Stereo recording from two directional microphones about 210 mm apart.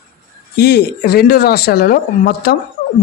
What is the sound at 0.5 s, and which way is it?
A man's voice, 50° left (ahead or behind).